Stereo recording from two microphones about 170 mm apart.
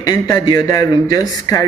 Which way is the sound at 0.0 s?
20° left (ahead or behind).